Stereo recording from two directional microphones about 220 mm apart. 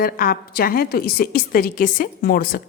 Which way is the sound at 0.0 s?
40° left (ahead or behind).